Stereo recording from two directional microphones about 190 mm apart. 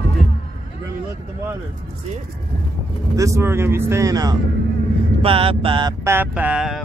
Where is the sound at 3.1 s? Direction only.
15° right (ahead or behind).